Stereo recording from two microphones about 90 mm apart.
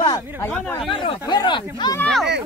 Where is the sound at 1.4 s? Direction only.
50° left (ahead or behind).